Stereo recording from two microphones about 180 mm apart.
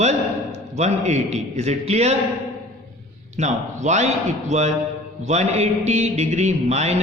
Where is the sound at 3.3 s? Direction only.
40° right (ahead or behind).